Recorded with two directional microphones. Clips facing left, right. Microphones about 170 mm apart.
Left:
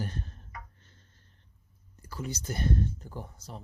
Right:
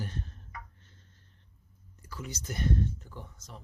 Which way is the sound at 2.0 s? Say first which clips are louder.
Left 4 dB; 35° left (ahead or behind).